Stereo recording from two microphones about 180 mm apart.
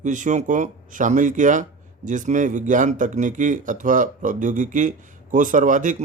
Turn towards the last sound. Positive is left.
turn(degrees=-45)  # may be behind; listen again after turning